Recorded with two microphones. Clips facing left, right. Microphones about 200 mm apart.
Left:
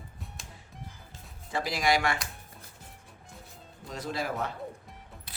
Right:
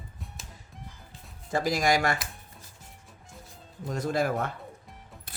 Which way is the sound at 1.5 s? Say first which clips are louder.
Right 3 dB; 45° right (ahead or behind).